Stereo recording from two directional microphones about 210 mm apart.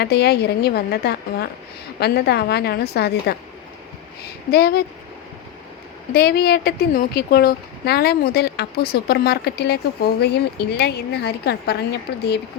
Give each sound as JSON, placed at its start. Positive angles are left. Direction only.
{"t": 0.0, "sound": "a woman's voice", "side_deg": 50}
{"t": 4.5, "sound": "a woman's voice", "side_deg": 50}
{"t": 6.1, "sound": "a woman's voice", "side_deg": 50}